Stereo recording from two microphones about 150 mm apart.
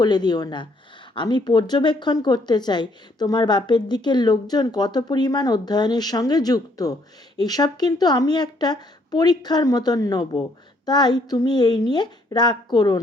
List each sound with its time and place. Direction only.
0.0 s a woman's voice: 30° left (ahead or behind)